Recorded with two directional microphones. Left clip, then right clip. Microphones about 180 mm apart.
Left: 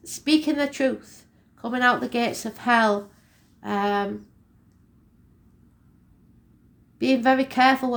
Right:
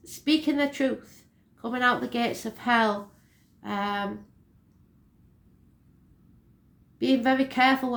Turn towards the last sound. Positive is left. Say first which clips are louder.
# left 3 dB
turn(degrees=40)  # may be behind; listen again after turning